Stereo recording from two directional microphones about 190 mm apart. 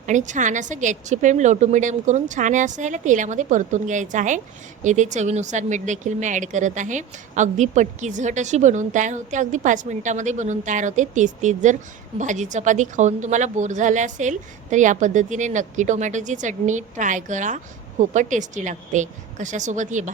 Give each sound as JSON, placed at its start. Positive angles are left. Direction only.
{"t": 0.0, "sound": "speech", "side_deg": -40}